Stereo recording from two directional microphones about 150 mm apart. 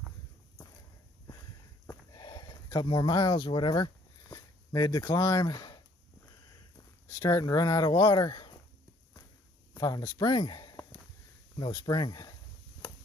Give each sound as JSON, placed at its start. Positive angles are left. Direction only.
{"t": 1.9, "sound": "a sound", "side_deg": 30}
{"t": 7.1, "sound": "speech", "side_deg": 25}
{"t": 9.8, "sound": "speech", "side_deg": 25}